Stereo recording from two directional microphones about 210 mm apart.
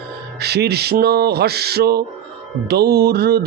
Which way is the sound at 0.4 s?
50° right (ahead or behind).